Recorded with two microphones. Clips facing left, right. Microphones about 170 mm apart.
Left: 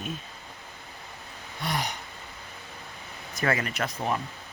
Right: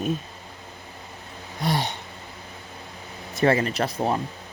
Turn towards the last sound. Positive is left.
turn(degrees=-35)  # may be behind; listen again after turning